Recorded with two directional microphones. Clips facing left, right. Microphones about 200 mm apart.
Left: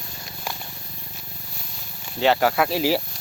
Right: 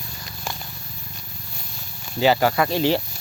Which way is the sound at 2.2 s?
Centre (ahead or behind).